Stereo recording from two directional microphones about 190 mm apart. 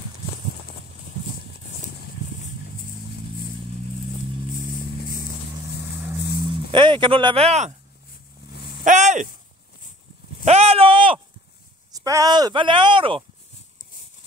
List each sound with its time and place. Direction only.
6.7 s speech: 25° right (ahead or behind)
8.8 s speech: 40° right (ahead or behind)
10.4 s a sound: 35° right (ahead or behind)
11.9 s speech: 20° right (ahead or behind)